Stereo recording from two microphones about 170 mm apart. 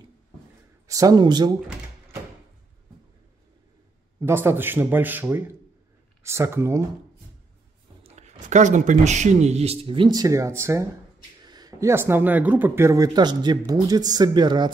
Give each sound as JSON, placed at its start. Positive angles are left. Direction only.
{"t": 0.8, "sound": "speech", "side_deg": -20}
{"t": 4.2, "sound": "speech", "side_deg": -15}
{"t": 8.0, "sound": "speech", "side_deg": -40}